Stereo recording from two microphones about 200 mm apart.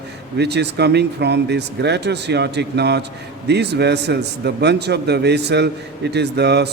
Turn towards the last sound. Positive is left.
turn(degrees=-55)  # may be behind; listen again after turning